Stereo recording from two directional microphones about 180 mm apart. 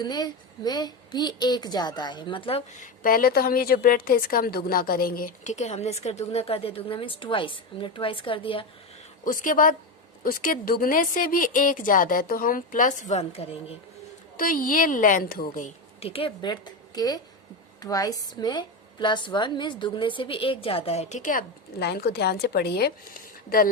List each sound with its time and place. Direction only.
0.0 s a woman's voice: 25° left (ahead or behind)
9.2 s a woman's voice: 50° left (ahead or behind); by 13.7 s 35° left (ahead or behind)
14.3 s a woman's voice: 50° left (ahead or behind)